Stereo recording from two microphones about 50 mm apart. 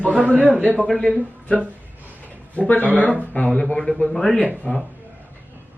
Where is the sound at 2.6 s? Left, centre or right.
Left.